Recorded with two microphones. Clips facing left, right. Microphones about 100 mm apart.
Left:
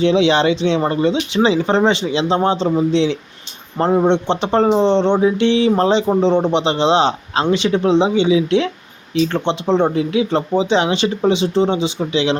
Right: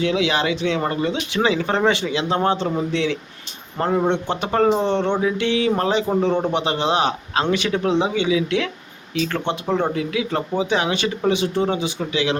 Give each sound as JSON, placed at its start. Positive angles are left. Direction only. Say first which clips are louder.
{"t": 0.0, "sound": "speech", "louder": "left 6 dB", "side_deg": 25}